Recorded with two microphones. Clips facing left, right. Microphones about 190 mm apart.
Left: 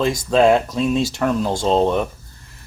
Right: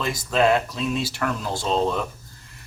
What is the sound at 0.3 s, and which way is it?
Speech, 25° left (ahead or behind).